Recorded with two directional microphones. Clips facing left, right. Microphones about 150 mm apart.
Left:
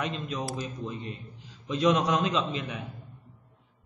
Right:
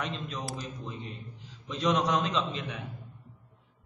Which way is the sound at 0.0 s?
5° left (ahead or behind).